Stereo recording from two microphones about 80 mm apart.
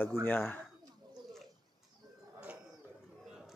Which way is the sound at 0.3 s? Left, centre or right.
Left.